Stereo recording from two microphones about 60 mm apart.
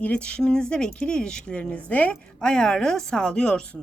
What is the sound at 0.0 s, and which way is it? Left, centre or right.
Speech, left.